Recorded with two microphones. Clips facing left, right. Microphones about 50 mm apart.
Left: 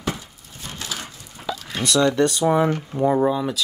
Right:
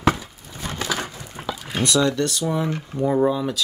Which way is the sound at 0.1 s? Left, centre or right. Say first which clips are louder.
Even; right.